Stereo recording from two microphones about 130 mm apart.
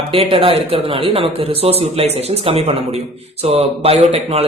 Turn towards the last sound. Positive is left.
turn(degrees=-50)  # may be behind; listen again after turning